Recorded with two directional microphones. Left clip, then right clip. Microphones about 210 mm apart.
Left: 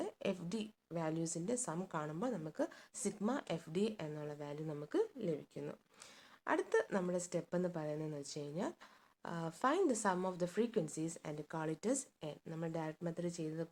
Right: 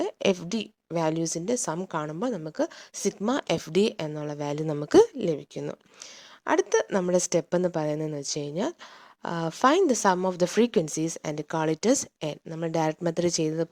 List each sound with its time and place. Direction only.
0.0 s a woman's voice: 40° right (ahead or behind)